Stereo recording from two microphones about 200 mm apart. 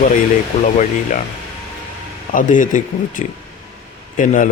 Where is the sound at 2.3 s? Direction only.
40° left (ahead or behind).